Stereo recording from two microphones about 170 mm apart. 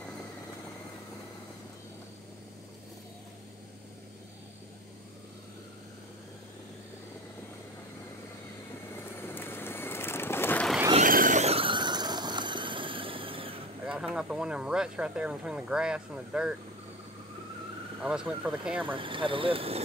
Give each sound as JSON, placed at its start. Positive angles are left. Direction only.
{"t": 8.9, "sound": "vehicle", "side_deg": 15}
{"t": 11.0, "sound": "vehicle", "side_deg": -55}
{"t": 13.8, "sound": "speech", "side_deg": -5}
{"t": 18.0, "sound": "speech", "side_deg": -5}
{"t": 18.9, "sound": "speech", "side_deg": -30}